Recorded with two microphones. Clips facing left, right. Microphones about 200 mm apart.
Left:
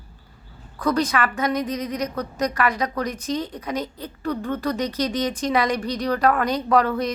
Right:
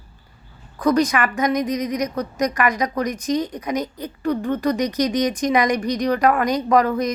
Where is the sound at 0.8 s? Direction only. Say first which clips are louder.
Right 4 dB; 15° right (ahead or behind).